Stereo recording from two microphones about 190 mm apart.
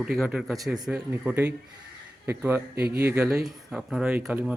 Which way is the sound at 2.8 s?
55° right (ahead or behind).